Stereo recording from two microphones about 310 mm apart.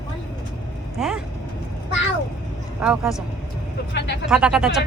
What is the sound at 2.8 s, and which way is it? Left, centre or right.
Speech, centre.